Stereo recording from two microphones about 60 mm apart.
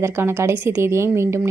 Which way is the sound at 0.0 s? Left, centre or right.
Right.